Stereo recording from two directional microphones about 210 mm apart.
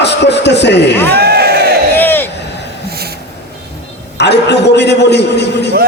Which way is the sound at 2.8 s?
50° right (ahead or behind).